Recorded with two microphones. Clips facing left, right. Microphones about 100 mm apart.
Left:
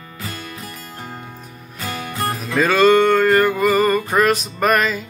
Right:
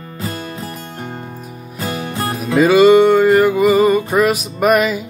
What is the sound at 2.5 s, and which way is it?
Music, 10° right (ahead or behind).